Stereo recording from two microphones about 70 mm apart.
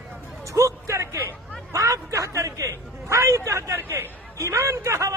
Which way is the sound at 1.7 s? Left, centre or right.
Right.